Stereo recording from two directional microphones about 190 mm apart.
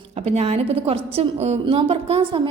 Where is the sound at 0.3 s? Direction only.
35° right (ahead or behind).